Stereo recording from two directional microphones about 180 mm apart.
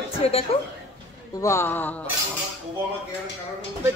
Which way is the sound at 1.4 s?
15° left (ahead or behind).